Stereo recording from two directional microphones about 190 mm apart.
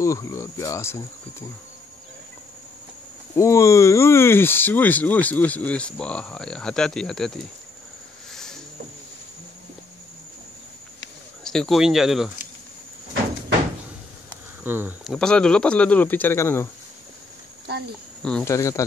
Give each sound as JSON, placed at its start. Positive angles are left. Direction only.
{"t": 0.0, "sound": "speech", "side_deg": 15}
{"t": 3.3, "sound": "speech", "side_deg": 15}
{"t": 8.3, "sound": "a sound", "side_deg": 5}
{"t": 11.4, "sound": "speech", "side_deg": 0}
{"t": 14.6, "sound": "speech", "side_deg": -10}
{"t": 15.0, "sound": "speech", "side_deg": 5}
{"t": 18.2, "sound": "speech", "side_deg": 5}
{"t": 18.5, "sound": "speech", "side_deg": 15}